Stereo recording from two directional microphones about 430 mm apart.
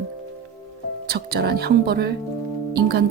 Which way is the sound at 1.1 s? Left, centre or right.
Right.